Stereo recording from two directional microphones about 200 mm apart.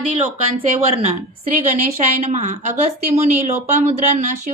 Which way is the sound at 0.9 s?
30° right (ahead or behind).